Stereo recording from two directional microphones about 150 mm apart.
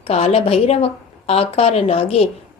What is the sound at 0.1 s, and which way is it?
A woman's voice, 45° left (ahead or behind).